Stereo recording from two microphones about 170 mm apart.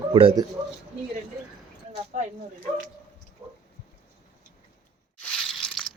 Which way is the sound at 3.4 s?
15° right (ahead or behind).